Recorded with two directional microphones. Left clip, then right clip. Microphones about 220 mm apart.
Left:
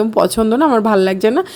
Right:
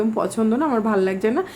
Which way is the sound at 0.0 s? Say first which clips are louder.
Left 8 dB; 40° left (ahead or behind).